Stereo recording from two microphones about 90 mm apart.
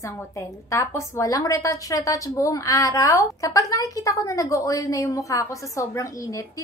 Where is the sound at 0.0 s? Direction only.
35° left (ahead or behind).